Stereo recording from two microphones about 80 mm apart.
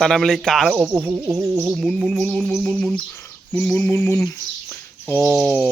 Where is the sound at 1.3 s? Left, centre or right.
Right.